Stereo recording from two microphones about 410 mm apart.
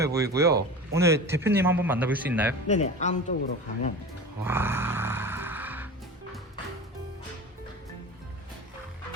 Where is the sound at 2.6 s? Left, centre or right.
Centre.